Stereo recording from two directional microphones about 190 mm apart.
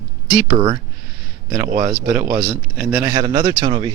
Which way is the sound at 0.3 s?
25° right (ahead or behind).